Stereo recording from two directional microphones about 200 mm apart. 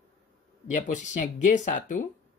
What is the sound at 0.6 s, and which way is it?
Speech, 40° left (ahead or behind).